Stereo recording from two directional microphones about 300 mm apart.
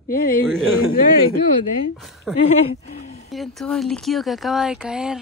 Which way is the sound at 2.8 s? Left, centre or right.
Left.